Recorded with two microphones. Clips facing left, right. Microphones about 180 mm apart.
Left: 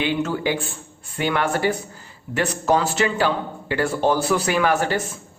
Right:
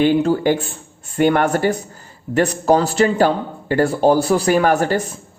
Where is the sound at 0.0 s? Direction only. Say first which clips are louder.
Right 8 dB; 40° right (ahead or behind).